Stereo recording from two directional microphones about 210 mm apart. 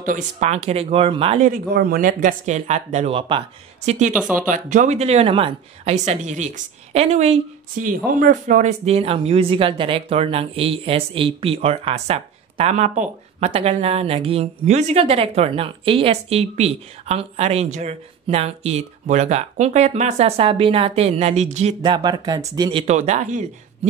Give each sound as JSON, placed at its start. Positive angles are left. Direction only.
{"t": 0.0, "sound": "speech", "side_deg": -35}
{"t": 1.5, "sound": "speech", "side_deg": -45}
{"t": 4.1, "sound": "speech", "side_deg": -5}
{"t": 4.5, "sound": "speech", "side_deg": -40}
{"t": 22.9, "sound": "speech", "side_deg": -35}